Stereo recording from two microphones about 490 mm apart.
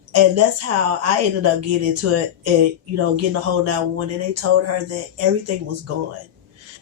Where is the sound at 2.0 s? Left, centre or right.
Right.